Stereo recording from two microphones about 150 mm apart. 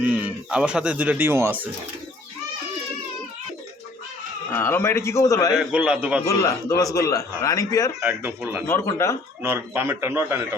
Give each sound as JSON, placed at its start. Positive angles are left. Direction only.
{"t": 0.0, "sound": "speech", "side_deg": -10}
{"t": 4.5, "sound": "a man's voice", "side_deg": 15}
{"t": 5.5, "sound": "speech", "side_deg": -5}
{"t": 6.2, "sound": "a man's voice", "side_deg": 20}
{"t": 8.0, "sound": "speech", "side_deg": -10}
{"t": 8.6, "sound": "a man's voice", "side_deg": 15}
{"t": 9.4, "sound": "speech", "side_deg": -15}